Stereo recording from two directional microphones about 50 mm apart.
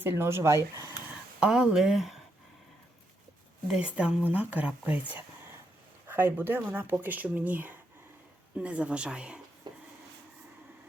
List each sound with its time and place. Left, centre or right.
0.0 s speech: right
1.4 s speech: centre
3.8 s speech: right
4.3 s speech: right
6.1 s speech: right
7.0 s speech: right
8.5 s speech: right